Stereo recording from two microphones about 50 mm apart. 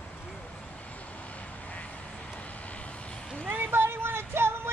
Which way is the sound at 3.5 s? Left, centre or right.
Right.